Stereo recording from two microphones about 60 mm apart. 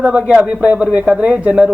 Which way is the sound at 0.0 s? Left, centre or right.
Right.